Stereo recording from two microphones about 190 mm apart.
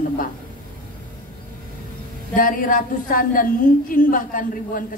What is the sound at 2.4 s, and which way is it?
A woman's voice, 45° left (ahead or behind).